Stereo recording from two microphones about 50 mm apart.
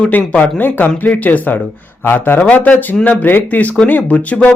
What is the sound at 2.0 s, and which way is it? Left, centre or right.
Speech, left.